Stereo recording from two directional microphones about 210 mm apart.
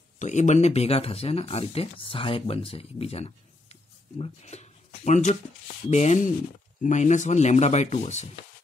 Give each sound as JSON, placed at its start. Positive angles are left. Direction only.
{"t": 0.2, "sound": "speech", "side_deg": 35}